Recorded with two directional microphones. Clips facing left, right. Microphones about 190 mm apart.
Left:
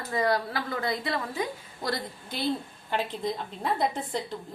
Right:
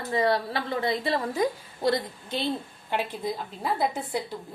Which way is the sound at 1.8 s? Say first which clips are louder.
Right 6 dB; 20° right (ahead or behind).